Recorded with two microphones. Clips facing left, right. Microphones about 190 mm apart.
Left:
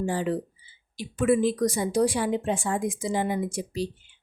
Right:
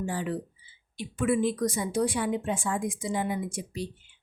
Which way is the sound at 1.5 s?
40° left (ahead or behind).